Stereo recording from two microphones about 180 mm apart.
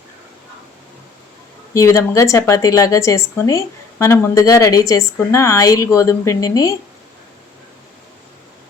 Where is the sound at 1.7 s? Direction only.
15° left (ahead or behind).